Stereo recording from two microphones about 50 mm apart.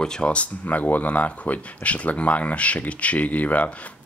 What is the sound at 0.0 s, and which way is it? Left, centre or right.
Speech, centre.